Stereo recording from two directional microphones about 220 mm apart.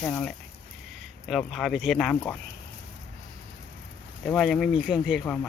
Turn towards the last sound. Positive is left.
turn(degrees=5)  # may be behind; listen again after turning